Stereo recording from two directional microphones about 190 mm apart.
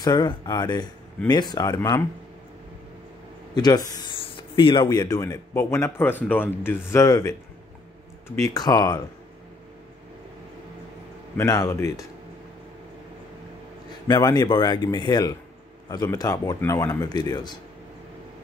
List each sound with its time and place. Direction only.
0.0 s speech: 20° left (ahead or behind)
3.5 s speech: 20° left (ahead or behind)
11.3 s speech: 20° left (ahead or behind)
14.0 s speech: 20° left (ahead or behind)